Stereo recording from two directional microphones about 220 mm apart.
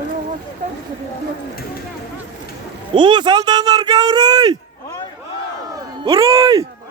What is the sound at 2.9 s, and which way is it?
Speech, 20° right (ahead or behind).